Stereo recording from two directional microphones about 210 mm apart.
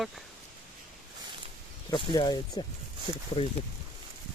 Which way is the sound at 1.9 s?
20° left (ahead or behind).